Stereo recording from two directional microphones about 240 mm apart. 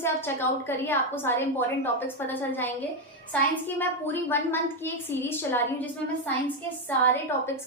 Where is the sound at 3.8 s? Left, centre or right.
Centre.